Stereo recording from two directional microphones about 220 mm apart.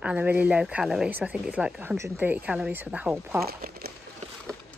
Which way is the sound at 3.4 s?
45° right (ahead or behind).